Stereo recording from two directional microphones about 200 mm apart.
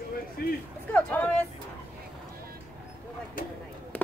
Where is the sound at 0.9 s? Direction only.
10° left (ahead or behind).